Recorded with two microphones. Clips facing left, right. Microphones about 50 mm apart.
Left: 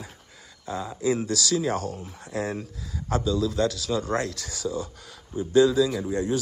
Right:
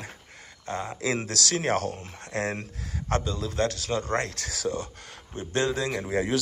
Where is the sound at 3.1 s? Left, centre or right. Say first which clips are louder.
Left 4 dB; right.